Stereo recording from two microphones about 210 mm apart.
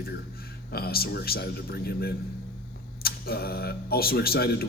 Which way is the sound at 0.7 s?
45° left (ahead or behind).